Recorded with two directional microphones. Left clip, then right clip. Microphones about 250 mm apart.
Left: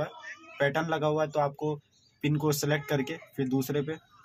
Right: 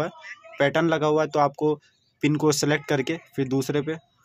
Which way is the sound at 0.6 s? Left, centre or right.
Right.